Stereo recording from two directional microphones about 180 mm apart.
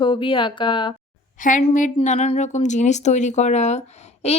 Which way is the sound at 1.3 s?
45° left (ahead or behind).